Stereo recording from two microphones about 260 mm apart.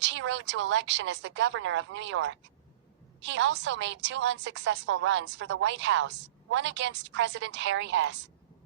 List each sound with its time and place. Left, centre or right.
0.1 s a woman's voice: right